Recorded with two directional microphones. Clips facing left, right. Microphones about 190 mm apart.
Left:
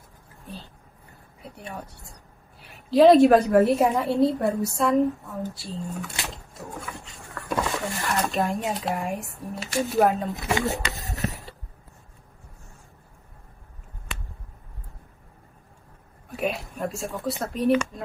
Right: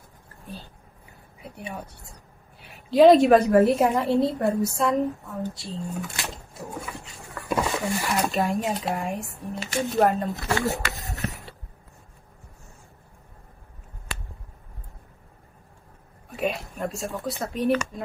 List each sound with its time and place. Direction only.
0.3 s a sound: centre (ahead or behind)
1.4 s a woman's voice: centre (ahead or behind)
7.7 s a woman's voice: centre (ahead or behind)
10.3 s speech: 20° left (ahead or behind)
11.2 s mechanisms: centre (ahead or behind)
16.3 s speech: centre (ahead or behind)